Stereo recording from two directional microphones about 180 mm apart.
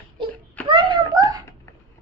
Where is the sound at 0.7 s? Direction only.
25° right (ahead or behind).